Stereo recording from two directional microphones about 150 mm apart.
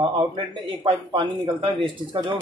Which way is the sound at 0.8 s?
35° right (ahead or behind).